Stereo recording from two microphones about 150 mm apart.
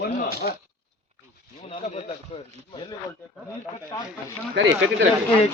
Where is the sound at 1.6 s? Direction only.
45° left (ahead or behind).